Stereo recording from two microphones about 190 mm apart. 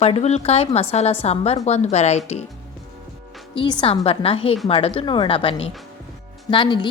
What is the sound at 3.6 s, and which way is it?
A woman's voice, 30° left (ahead or behind).